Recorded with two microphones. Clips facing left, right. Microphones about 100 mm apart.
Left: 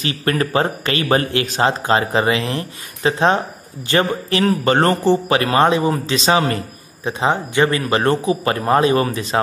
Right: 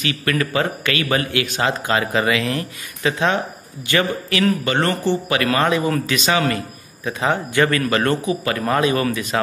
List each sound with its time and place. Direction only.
0.0 s a man's voice: 35° left (ahead or behind)